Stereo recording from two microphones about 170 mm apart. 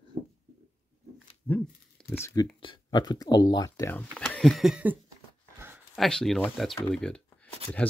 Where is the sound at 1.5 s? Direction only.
15° left (ahead or behind).